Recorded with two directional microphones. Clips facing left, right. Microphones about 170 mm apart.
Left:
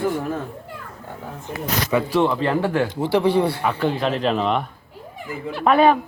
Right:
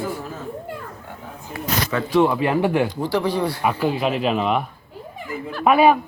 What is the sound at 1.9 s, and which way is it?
Speech, 10° left (ahead or behind).